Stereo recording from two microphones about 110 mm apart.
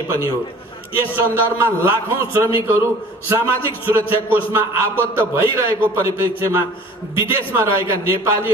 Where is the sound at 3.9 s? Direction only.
20° right (ahead or behind).